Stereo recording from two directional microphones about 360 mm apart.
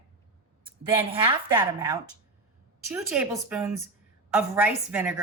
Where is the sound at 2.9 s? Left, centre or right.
Centre.